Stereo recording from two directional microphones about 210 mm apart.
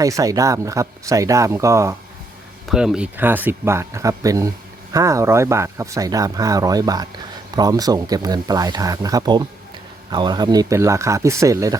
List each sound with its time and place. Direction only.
0.0 s speech: 15° right (ahead or behind)
2.6 s speech: 5° right (ahead or behind)